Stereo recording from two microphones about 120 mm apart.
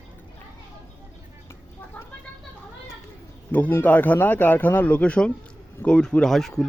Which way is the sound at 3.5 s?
15° left (ahead or behind).